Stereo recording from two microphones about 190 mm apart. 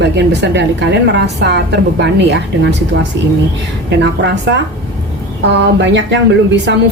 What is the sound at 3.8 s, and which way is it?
A woman's voice, 70° right (ahead or behind).